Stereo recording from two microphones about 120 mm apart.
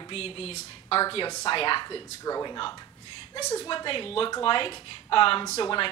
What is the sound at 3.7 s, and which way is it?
A woman's voice, 45° left (ahead or behind).